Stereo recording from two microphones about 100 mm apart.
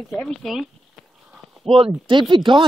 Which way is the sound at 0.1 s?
5° left (ahead or behind).